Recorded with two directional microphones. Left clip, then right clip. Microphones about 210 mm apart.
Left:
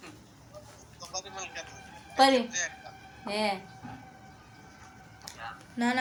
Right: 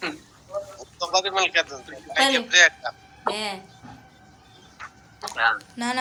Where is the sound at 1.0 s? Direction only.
40° right (ahead or behind).